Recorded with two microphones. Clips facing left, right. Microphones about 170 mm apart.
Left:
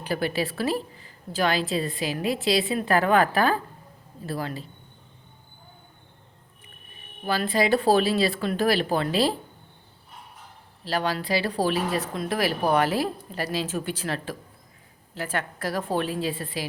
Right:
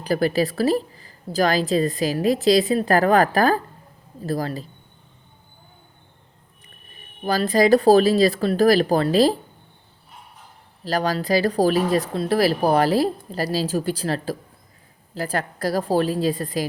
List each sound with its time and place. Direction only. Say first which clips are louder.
0.0 s a woman's voice: right 6 dB; 40° right (ahead or behind)
7.3 s a woman's voice: right 6 dB; 40° right (ahead or behind)
10.8 s a woman's voice: right 4 dB; 40° right (ahead or behind)